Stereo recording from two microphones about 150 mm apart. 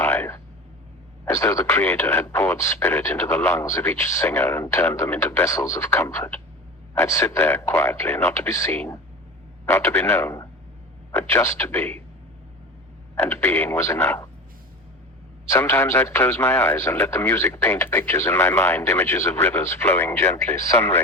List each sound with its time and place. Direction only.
0.0 s a sound: 15° left (ahead or behind)
1.2 s speech: 20° left (ahead or behind)
13.1 s speech: 15° left (ahead or behind)
15.4 s speech: 15° left (ahead or behind)